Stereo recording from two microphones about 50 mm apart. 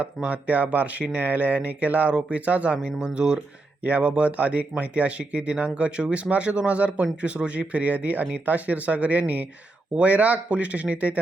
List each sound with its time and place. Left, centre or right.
0.0 s speech: right
2.7 s speech: centre